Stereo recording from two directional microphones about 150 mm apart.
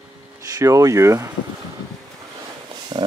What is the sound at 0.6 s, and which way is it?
Speech, 20° right (ahead or behind).